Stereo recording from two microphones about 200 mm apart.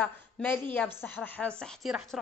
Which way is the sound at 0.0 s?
5° left (ahead or behind).